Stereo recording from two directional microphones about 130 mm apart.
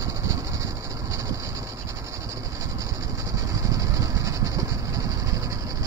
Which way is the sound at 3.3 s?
25° right (ahead or behind).